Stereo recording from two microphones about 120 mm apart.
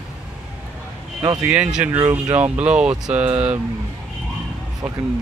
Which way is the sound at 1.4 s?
10° right (ahead or behind).